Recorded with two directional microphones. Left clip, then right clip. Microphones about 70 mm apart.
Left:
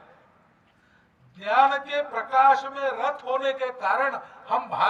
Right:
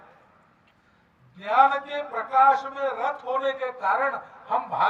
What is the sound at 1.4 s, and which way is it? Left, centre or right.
A man's voice, left.